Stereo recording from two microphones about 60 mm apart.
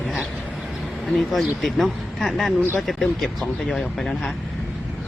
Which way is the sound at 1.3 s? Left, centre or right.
Centre.